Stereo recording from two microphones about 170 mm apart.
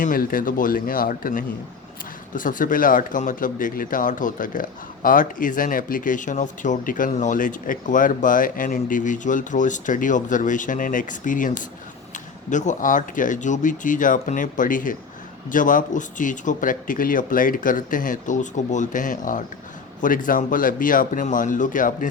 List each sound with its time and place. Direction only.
0.0 s speech: 55° left (ahead or behind)